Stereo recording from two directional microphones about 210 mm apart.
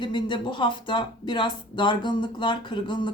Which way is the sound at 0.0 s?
25° left (ahead or behind).